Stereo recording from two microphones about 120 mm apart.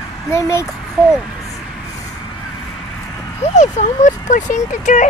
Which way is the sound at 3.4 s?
75° left (ahead or behind).